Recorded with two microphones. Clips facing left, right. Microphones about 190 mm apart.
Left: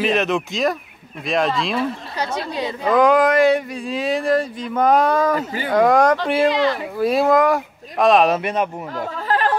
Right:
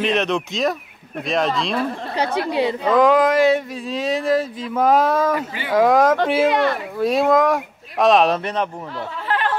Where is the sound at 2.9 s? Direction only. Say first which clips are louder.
Left 1 dB; centre (ahead or behind).